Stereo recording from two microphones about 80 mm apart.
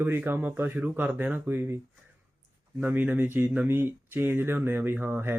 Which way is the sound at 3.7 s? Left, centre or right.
Right.